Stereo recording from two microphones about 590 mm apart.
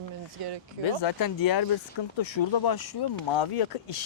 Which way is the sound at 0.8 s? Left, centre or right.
Left.